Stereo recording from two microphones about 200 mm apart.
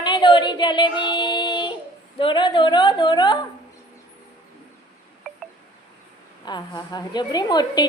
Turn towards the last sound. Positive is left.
turn(degrees=20)  # may be behind; listen again after turning